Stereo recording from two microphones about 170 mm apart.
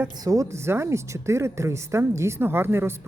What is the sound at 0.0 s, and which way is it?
A woman's voice, 20° right (ahead or behind).